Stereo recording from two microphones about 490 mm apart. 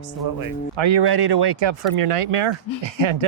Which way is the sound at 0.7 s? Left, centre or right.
Right.